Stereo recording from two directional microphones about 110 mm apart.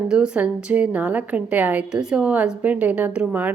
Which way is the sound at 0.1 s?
10° right (ahead or behind).